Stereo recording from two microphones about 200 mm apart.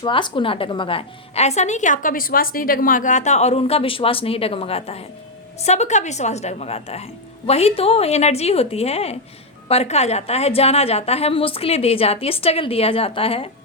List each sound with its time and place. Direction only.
0.0 s a woman's voice: 25° left (ahead or behind)